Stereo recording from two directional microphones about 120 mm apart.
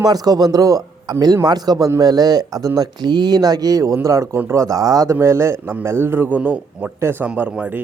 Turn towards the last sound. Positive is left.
turn(degrees=-10)  # may be behind; listen again after turning